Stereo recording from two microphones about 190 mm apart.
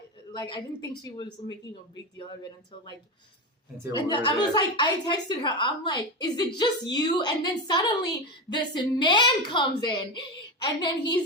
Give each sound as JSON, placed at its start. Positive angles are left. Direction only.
{"t": 0.3, "sound": "speech", "side_deg": 25}
{"t": 3.9, "sound": "speech", "side_deg": 25}